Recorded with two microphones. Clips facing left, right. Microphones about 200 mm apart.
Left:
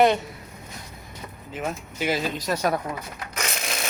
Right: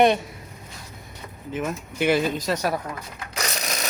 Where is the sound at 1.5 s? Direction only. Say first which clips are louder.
Right 3 dB; 55° right (ahead or behind).